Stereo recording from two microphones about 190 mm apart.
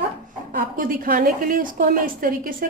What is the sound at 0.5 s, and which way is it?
A woman's voice, 50° right (ahead or behind).